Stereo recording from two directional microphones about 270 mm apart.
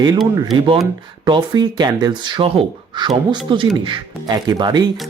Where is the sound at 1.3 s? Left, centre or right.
Centre.